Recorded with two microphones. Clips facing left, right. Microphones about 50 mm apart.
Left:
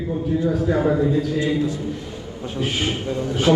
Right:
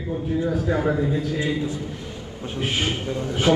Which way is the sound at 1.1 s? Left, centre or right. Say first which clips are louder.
Left 4 dB; right.